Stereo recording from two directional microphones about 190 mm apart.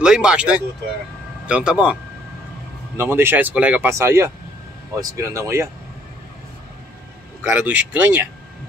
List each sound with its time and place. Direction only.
0.0 s speech: 5° right (ahead or behind)
3.0 s speech: 10° right (ahead or behind)
7.5 s speech: 10° right (ahead or behind)